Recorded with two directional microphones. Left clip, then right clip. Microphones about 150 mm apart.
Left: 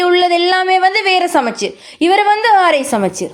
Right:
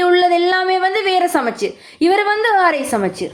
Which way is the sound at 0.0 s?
35° left (ahead or behind).